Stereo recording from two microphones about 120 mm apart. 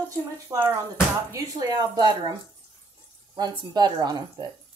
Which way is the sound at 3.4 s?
35° right (ahead or behind).